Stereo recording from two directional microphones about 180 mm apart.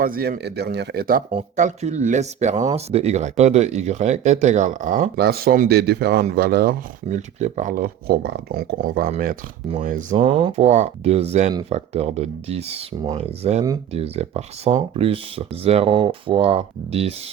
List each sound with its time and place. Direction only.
0.0 s speech: 55° right (ahead or behind)
1.3 s speech: 40° right (ahead or behind)
7.3 s speech: 40° right (ahead or behind)
10.3 s speech: 35° right (ahead or behind)